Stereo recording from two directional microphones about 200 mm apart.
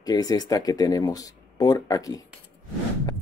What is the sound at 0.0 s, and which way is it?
Speech, 20° left (ahead or behind).